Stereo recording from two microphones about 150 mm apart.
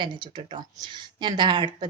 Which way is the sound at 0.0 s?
35° right (ahead or behind).